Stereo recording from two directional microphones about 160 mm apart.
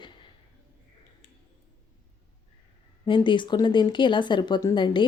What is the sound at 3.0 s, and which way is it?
Speech, 30° left (ahead or behind).